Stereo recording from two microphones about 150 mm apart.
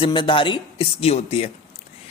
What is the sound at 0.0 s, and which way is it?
Speech, 30° left (ahead or behind).